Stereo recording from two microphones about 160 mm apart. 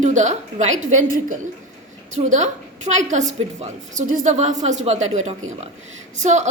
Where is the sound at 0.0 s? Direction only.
50° right (ahead or behind).